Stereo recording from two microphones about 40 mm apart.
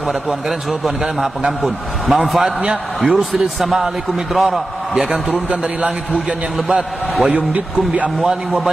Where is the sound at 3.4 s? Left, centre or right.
Centre.